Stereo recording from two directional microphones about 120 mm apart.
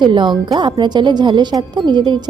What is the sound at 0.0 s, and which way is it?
Speech, 40° right (ahead or behind).